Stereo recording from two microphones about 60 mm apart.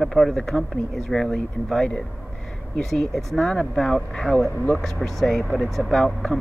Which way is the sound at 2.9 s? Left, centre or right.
Centre.